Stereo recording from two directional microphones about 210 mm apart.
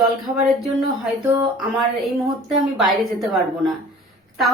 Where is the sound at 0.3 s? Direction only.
15° right (ahead or behind).